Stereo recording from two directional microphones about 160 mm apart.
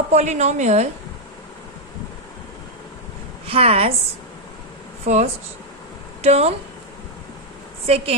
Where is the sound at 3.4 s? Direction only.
40° right (ahead or behind).